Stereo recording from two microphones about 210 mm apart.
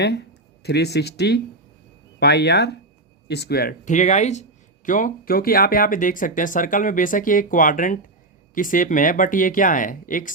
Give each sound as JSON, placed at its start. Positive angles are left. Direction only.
{"t": 0.0, "sound": "speech", "side_deg": 50}